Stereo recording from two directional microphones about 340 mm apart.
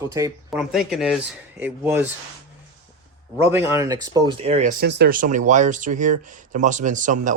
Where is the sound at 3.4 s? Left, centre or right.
Centre.